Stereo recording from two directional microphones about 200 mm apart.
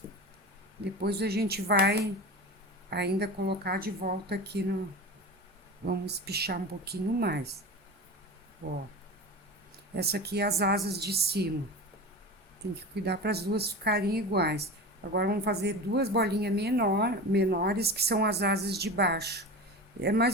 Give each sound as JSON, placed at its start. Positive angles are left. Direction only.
{"t": 1.0, "sound": "a woman's voice", "side_deg": -55}
{"t": 5.8, "sound": "a woman's voice", "side_deg": -55}
{"t": 9.9, "sound": "a woman's voice", "side_deg": -55}
{"t": 13.1, "sound": "a woman's voice", "side_deg": -55}